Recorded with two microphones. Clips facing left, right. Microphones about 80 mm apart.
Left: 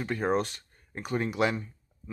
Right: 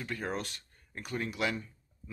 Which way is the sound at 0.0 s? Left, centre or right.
Left.